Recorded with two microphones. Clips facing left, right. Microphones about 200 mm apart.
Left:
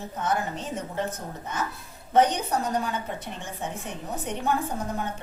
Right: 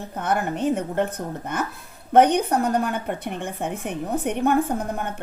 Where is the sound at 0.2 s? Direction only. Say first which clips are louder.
Right 5 dB; 60° right (ahead or behind).